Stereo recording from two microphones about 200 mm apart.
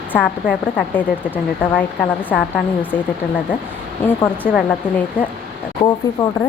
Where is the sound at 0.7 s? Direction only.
10° left (ahead or behind).